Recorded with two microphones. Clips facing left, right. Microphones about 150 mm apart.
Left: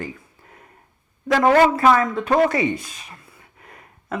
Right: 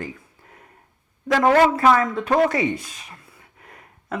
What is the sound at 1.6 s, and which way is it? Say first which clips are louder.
Speech: left 1 dB; 15° left (ahead or behind).